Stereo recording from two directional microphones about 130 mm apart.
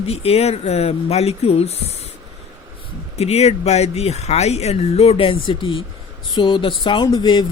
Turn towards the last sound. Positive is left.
turn(degrees=35)  # may be behind; listen again after turning